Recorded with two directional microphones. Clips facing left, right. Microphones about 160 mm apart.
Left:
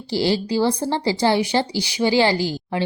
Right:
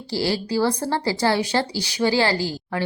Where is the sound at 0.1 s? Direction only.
20° left (ahead or behind).